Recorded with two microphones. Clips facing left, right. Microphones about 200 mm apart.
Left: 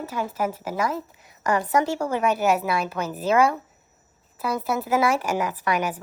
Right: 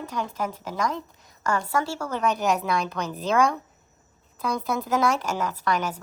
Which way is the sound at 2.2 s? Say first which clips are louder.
Left 1 dB; 5° left (ahead or behind).